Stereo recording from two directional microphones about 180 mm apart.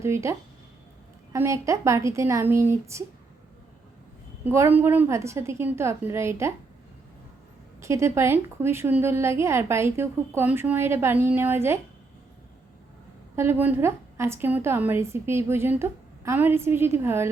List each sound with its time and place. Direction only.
0.0 s a woman's voice: 15° right (ahead or behind)
4.4 s a woman's voice: 10° right (ahead or behind)
7.8 s a woman's voice: 15° right (ahead or behind)
13.3 s a woman's voice: 15° right (ahead or behind)